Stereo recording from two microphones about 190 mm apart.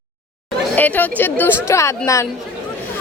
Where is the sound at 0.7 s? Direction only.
10° left (ahead or behind).